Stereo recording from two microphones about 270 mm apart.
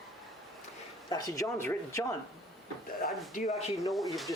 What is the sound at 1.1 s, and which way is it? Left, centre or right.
Speech, centre.